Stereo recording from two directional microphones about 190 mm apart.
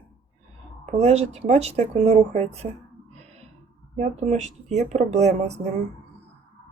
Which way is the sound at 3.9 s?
40° right (ahead or behind).